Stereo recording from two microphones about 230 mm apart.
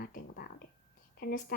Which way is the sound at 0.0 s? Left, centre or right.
Left.